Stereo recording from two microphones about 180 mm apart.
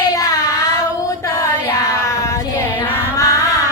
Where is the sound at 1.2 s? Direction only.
15° left (ahead or behind).